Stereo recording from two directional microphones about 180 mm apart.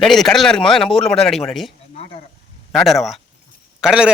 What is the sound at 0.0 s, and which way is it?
A man's voice, centre (ahead or behind).